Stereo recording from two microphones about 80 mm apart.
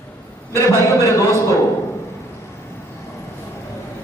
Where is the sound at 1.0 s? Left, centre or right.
Left.